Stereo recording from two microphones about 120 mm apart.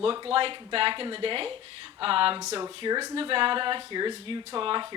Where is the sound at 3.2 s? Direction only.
45° right (ahead or behind).